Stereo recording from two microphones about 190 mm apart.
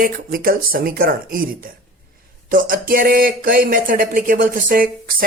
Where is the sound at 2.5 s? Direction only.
45° right (ahead or behind).